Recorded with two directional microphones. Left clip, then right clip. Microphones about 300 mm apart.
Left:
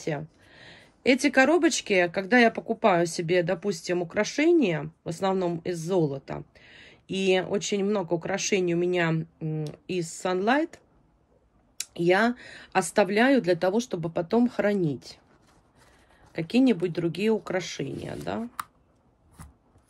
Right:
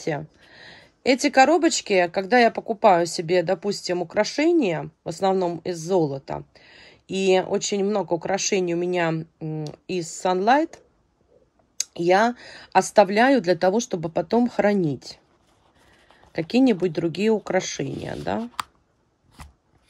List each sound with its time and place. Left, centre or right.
0.0 s speech: centre
16.3 s speech: centre